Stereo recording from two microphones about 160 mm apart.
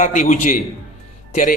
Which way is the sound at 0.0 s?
55° left (ahead or behind).